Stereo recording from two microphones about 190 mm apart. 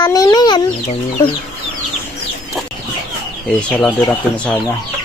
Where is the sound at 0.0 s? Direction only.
20° left (ahead or behind).